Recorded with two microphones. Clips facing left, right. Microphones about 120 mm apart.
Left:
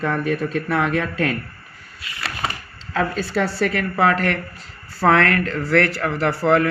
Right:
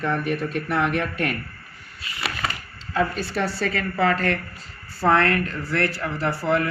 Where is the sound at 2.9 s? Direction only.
85° left.